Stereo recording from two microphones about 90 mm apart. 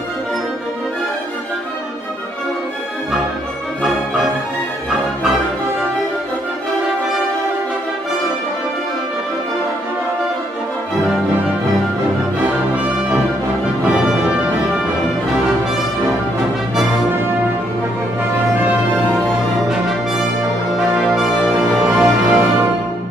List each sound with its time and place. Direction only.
13.8 s music: 15° right (ahead or behind)
19.7 s brass instrument: 5° right (ahead or behind)
21.0 s music: 5° right (ahead or behind)
21.5 s music: 15° right (ahead or behind)